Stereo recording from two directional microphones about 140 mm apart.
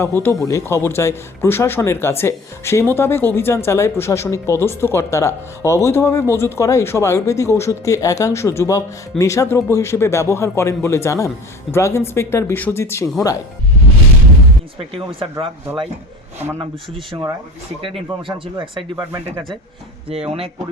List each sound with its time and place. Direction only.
0.0 s speech: 15° left (ahead or behind)
14.8 s speech: 40° right (ahead or behind)
17.1 s speech: 30° right (ahead or behind)
20.1 s speech: 45° right (ahead or behind)